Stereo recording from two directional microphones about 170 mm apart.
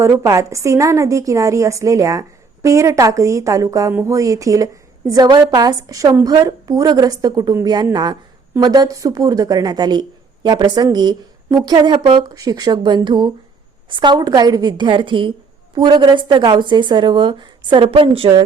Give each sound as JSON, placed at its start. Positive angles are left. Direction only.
{"t": 0.0, "sound": "a woman's voice", "side_deg": -20}